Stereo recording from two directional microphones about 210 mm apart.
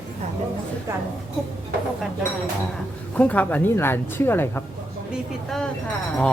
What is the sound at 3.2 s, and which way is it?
A woman's voice, 5° left (ahead or behind).